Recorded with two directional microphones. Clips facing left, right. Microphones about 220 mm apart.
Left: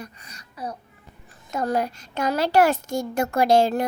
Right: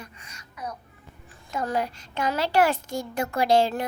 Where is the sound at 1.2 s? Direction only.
40° left (ahead or behind).